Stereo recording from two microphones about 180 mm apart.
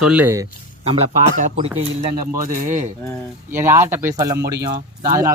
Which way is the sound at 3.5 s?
10° right (ahead or behind).